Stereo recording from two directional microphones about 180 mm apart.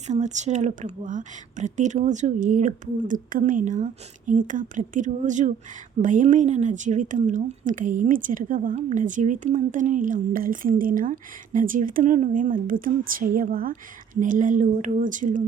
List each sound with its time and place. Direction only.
0.1 s speech: 40° right (ahead or behind)